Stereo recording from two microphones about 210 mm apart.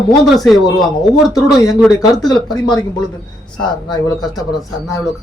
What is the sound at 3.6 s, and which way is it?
Speech, 20° left (ahead or behind).